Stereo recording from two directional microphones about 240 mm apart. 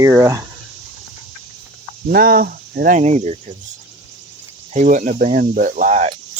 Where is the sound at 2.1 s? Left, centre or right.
Right.